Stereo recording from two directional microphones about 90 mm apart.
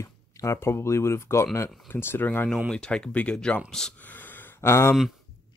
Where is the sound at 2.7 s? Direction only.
10° left (ahead or behind).